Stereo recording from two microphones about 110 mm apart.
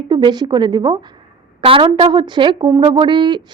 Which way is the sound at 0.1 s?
45° right (ahead or behind).